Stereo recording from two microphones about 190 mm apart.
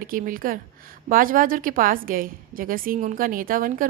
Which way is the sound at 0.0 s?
45° right (ahead or behind).